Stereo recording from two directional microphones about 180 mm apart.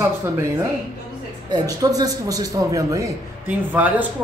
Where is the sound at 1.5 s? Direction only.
20° right (ahead or behind).